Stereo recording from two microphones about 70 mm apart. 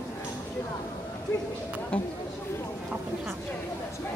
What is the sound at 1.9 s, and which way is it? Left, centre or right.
Speech, centre.